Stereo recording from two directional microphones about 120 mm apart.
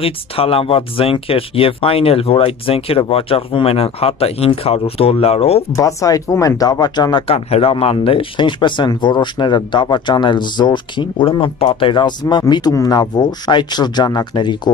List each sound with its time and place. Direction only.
0.0 s speech: 50° left (ahead or behind)
5.8 s speech: 25° left (ahead or behind)
7.2 s speech: 55° left (ahead or behind); by 14.7 s 40° left (ahead or behind)